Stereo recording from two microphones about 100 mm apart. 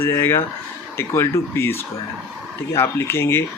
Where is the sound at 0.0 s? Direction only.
25° left (ahead or behind).